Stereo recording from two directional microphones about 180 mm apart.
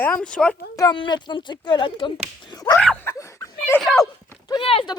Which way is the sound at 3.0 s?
15° left (ahead or behind).